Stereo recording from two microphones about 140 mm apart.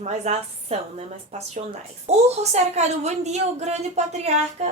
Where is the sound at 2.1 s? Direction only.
50° right (ahead or behind).